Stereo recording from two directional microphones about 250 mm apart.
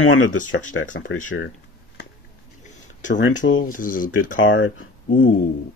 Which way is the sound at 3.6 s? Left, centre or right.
Left.